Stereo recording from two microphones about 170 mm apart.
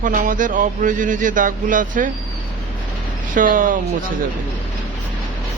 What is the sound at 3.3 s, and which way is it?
Speech, 55° right (ahead or behind).